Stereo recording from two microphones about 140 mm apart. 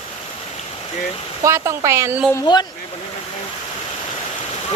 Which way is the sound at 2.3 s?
30° left (ahead or behind).